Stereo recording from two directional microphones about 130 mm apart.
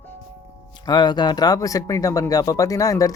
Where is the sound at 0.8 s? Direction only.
35° left (ahead or behind).